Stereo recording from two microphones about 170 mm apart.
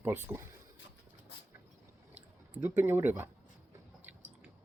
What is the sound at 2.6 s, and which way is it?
Speech, 15° right (ahead or behind).